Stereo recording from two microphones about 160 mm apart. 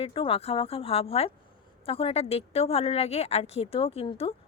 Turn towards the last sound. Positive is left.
turn(degrees=35)  # may be behind; listen again after turning